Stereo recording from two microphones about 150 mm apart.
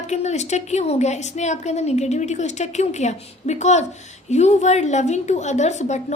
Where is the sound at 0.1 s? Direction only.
50° left (ahead or behind).